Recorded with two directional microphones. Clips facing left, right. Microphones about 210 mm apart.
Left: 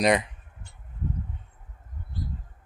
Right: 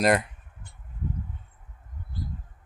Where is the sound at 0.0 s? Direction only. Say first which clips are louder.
Even; centre (ahead or behind).